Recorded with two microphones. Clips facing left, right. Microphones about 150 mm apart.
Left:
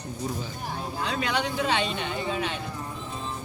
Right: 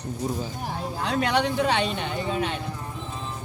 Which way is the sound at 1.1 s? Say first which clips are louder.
Right 6 dB; 50° right (ahead or behind).